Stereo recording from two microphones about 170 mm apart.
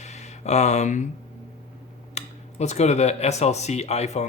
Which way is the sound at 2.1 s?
40° left (ahead or behind).